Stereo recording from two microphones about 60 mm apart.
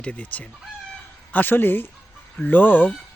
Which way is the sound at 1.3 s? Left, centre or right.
Left.